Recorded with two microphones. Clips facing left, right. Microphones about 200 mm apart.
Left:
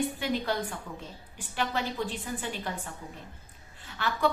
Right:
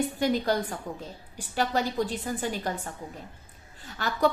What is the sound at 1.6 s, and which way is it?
A woman's voice, 40° right (ahead or behind).